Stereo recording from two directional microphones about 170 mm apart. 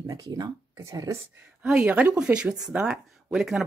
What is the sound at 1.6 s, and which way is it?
Speech, 5° right (ahead or behind).